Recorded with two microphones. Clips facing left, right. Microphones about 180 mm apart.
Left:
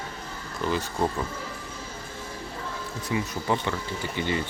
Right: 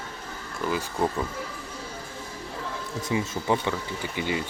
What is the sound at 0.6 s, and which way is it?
Speech, 5° right (ahead or behind).